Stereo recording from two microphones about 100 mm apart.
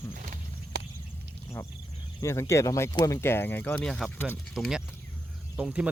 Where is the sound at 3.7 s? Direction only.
10° left (ahead or behind).